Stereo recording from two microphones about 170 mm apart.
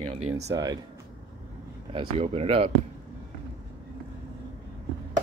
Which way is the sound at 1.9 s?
35° right (ahead or behind).